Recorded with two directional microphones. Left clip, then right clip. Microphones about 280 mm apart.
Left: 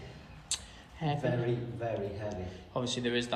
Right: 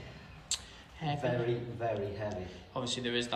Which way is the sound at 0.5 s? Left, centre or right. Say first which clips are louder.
Even; centre.